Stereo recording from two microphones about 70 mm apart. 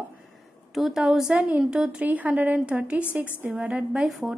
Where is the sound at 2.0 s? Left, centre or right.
Right.